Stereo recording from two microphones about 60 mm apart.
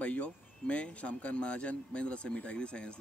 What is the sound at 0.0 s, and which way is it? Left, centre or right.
Speech, left.